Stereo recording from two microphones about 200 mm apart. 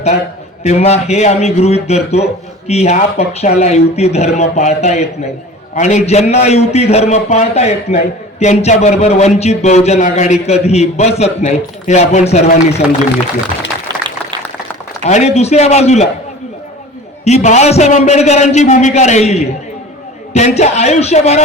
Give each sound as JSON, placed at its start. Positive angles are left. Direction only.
{"t": 0.6, "sound": "a man's voice", "side_deg": 35}
{"t": 15.0, "sound": "a man's voice", "side_deg": 35}
{"t": 17.2, "sound": "a man's voice", "side_deg": 35}